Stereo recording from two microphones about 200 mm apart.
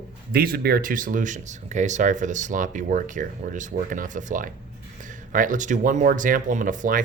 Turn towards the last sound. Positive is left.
turn(degrees=-40)  # may be behind; listen again after turning